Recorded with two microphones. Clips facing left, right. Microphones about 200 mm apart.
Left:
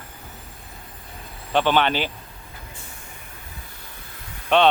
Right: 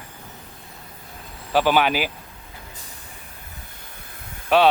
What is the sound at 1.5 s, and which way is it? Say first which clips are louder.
Speech: right 1 dB; 5° right (ahead or behind).